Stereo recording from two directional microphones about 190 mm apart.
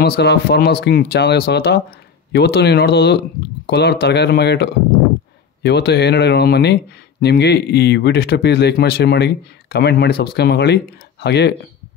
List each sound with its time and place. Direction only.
0.0 s speech: 55° left (ahead or behind)